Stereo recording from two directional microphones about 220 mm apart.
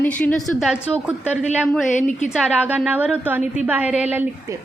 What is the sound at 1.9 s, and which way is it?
Speech, 35° left (ahead or behind).